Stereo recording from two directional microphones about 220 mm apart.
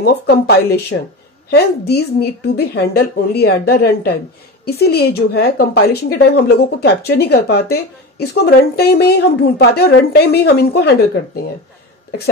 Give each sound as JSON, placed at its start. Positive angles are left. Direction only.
{"t": 0.0, "sound": "a woman's voice", "side_deg": 45}